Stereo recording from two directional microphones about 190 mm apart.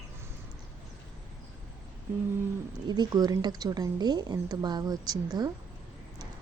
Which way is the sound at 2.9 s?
20° right (ahead or behind).